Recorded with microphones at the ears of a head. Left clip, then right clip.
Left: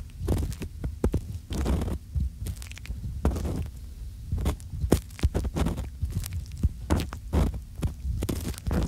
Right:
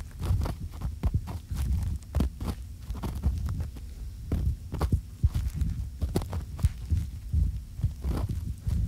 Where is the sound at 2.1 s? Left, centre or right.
Right.